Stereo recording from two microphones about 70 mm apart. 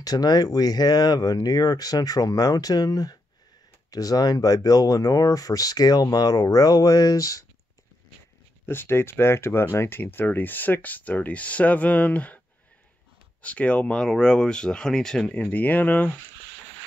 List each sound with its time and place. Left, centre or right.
0.0 s speech: left
8.6 s speech: left
13.4 s speech: centre
15.3 s speech: left